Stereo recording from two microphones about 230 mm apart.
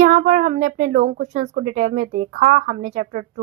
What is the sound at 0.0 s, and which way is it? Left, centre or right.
Speech, right.